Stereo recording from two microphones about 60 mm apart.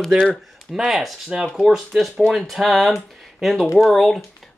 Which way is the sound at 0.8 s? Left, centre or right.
Centre.